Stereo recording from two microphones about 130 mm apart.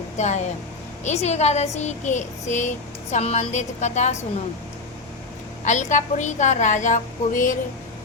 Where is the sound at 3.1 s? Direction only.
55° left (ahead or behind).